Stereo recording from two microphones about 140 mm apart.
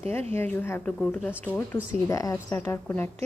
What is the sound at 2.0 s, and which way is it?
Speech, 25° left (ahead or behind).